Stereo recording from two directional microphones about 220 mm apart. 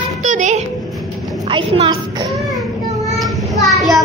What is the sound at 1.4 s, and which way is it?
Speech, 25° right (ahead or behind).